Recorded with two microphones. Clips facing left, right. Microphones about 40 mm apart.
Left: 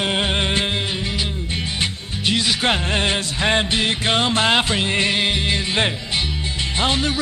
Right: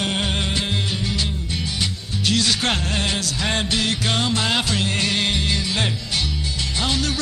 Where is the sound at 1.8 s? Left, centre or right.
Left.